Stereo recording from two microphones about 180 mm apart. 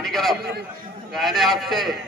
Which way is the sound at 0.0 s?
Centre (ahead or behind).